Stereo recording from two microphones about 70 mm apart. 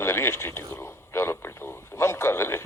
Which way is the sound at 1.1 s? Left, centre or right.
Left.